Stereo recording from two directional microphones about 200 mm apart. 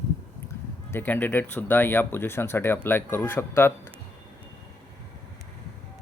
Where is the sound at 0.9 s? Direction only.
10° left (ahead or behind).